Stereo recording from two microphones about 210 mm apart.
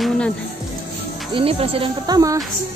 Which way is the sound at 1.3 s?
25° right (ahead or behind).